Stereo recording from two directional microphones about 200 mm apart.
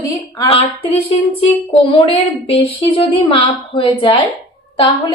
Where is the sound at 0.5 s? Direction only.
25° left (ahead or behind).